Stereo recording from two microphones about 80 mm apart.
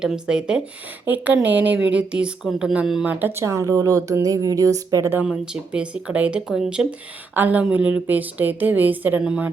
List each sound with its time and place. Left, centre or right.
0.0 s speech: centre
1.0 s a woman's voice: right
2.4 s speech: centre
3.1 s a woman's voice: right
3.4 s speech: right
5.2 s speech: centre
7.3 s a woman's voice: right